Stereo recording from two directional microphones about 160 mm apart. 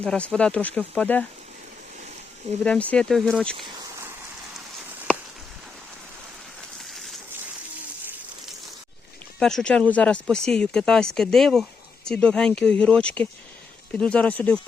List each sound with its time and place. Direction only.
0.0 s speech: 5° left (ahead or behind)
2.6 s speech: 10° left (ahead or behind)
6.7 s a sound: centre (ahead or behind)
9.4 s speech: 5° left (ahead or behind)